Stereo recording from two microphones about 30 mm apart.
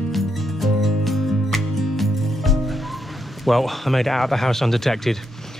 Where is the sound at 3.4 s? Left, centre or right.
Centre.